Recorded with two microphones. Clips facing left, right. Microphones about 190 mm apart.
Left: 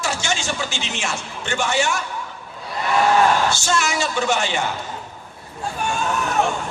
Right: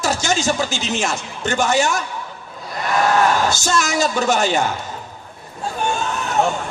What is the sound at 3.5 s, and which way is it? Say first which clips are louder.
A man's voice: right 2 dB; 40° right (ahead or behind).